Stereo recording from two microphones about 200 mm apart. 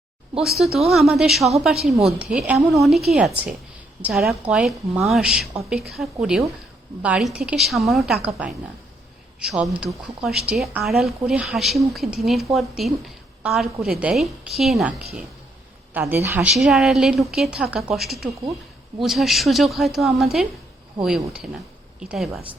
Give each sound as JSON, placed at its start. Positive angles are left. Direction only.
{"t": 0.9, "sound": "speech", "side_deg": 0}
{"t": 9.4, "sound": "speech", "side_deg": 0}
{"t": 16.6, "sound": "speech", "side_deg": 0}